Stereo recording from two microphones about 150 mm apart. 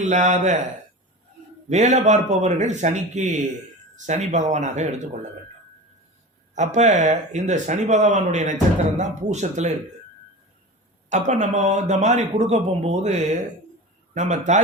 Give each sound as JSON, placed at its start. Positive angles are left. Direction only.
{"t": 0.0, "sound": "speech", "side_deg": -55}
{"t": 1.7, "sound": "a man's voice", "side_deg": -55}
{"t": 6.5, "sound": "a man's voice", "side_deg": -50}
{"t": 11.1, "sound": "a man's voice", "side_deg": -50}